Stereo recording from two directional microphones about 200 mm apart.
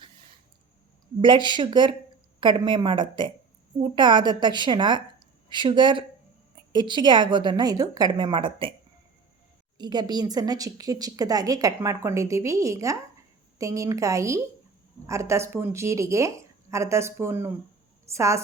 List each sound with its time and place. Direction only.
1.2 s a woman's voice: 25° right (ahead or behind)
9.7 s speech: 20° right (ahead or behind)